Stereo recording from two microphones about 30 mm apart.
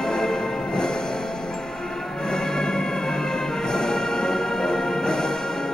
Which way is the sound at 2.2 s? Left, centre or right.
Left.